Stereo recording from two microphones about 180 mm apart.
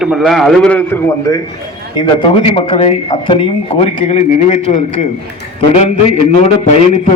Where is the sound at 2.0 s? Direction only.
30° left (ahead or behind).